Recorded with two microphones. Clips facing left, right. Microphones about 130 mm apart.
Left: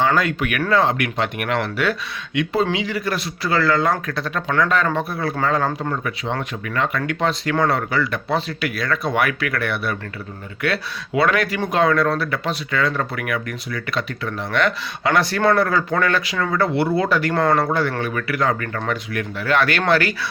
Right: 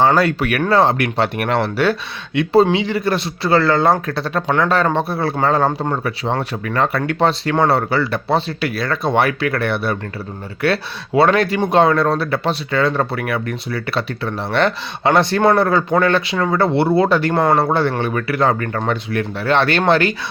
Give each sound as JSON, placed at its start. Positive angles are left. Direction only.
{"t": 0.0, "sound": "a man's voice", "side_deg": -35}